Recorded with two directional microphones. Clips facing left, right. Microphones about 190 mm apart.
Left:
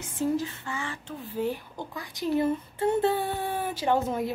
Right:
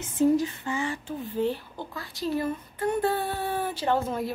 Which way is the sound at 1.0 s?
5° left (ahead or behind).